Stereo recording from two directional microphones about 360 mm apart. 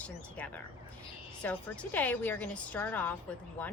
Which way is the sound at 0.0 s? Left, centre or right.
Centre.